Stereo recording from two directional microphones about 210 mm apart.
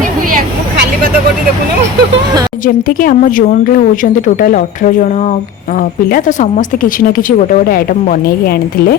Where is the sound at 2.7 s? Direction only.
40° left (ahead or behind).